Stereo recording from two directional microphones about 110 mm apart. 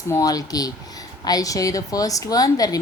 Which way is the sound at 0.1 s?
35° left (ahead or behind).